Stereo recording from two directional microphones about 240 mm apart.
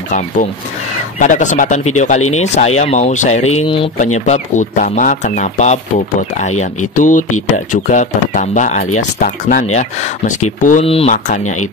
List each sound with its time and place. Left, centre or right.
1.2 s speech: left